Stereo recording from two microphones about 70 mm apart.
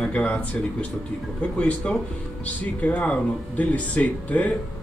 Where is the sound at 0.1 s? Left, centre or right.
Centre.